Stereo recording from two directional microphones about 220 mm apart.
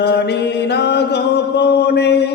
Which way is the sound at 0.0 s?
50° left (ahead or behind).